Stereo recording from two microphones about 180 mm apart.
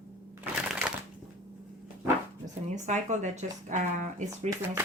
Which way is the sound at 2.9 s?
40° right (ahead or behind).